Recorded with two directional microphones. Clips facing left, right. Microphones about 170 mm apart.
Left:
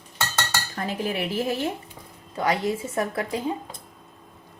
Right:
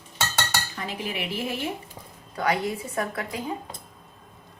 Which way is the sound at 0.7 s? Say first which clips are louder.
Left 4 dB; 45° left (ahead or behind).